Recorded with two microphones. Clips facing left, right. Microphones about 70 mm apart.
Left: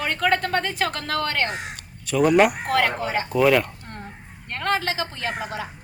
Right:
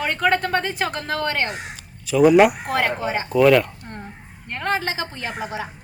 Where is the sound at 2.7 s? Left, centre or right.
Right.